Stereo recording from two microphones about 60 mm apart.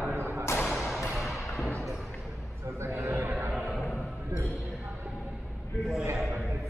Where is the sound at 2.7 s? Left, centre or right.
Right.